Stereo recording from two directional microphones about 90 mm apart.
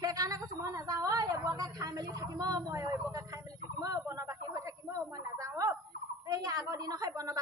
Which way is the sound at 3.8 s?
40° right (ahead or behind).